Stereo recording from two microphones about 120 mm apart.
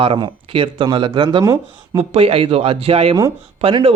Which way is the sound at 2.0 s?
55° right (ahead or behind).